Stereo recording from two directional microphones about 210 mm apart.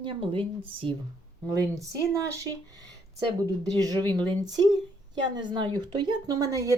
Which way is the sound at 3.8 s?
20° right (ahead or behind).